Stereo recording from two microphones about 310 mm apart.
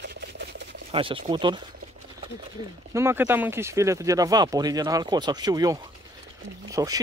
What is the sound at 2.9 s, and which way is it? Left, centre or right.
Speech, centre.